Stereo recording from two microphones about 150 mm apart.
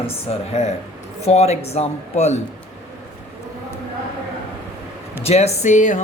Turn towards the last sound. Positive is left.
turn(degrees=55)  # may be behind; listen again after turning